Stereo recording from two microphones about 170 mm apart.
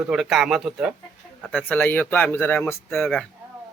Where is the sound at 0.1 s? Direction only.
5° right (ahead or behind).